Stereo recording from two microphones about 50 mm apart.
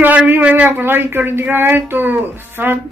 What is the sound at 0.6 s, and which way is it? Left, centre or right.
Speech, right.